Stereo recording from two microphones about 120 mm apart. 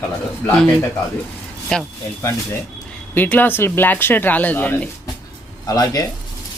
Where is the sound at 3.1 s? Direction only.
15° left (ahead or behind).